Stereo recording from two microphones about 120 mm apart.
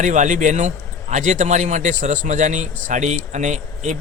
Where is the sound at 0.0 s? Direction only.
90° right.